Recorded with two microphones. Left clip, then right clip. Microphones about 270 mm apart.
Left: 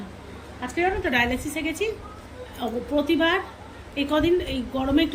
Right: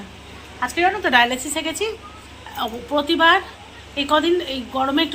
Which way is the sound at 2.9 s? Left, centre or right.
Centre.